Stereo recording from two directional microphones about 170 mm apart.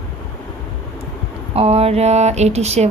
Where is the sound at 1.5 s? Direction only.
35° right (ahead or behind).